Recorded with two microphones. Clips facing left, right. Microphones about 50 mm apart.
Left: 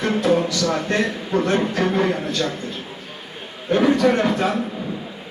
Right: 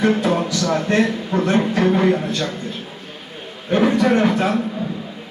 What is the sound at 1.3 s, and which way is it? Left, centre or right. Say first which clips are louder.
Speech: right 2 dB; centre.